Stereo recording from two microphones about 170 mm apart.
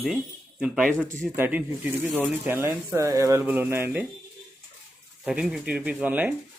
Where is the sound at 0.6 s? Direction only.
5° right (ahead or behind).